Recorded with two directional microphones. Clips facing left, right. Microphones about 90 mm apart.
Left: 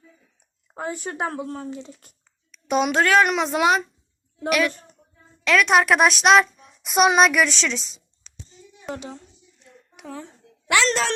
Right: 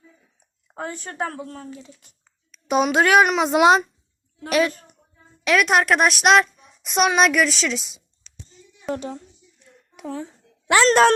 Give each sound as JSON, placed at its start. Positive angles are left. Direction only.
{"t": 0.7, "sound": "a woman's voice", "side_deg": 5}
{"t": 1.3, "sound": "a woman's voice", "side_deg": 30}
{"t": 2.5, "sound": "a child's voice", "side_deg": 0}
{"t": 4.4, "sound": "a woman's voice", "side_deg": -30}
{"t": 5.5, "sound": "a woman's voice", "side_deg": -5}
{"t": 9.0, "sound": "a woman's voice", "side_deg": -40}
{"t": 9.9, "sound": "a sound", "side_deg": -40}
{"t": 10.7, "sound": "speech", "side_deg": -40}